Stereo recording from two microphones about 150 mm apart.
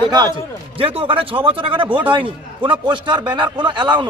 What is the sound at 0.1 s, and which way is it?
A man's voice, 30° right (ahead or behind).